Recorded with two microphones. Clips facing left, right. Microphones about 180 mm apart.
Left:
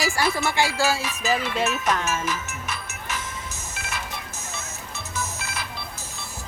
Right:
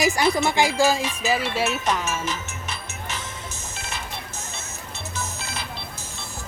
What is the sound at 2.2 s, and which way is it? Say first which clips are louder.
Music: left 1 dB; 25° right (ahead or behind).